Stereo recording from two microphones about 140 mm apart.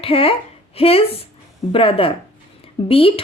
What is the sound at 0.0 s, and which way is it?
A woman's voice, 40° left (ahead or behind).